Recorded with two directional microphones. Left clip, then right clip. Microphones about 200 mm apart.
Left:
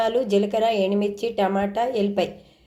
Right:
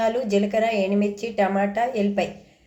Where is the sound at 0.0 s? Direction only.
20° left (ahead or behind).